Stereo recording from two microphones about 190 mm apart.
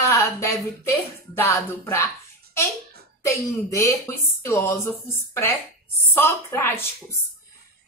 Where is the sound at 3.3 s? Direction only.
15° left (ahead or behind).